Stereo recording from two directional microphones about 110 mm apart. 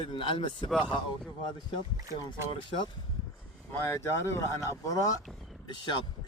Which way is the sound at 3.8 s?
25° left (ahead or behind).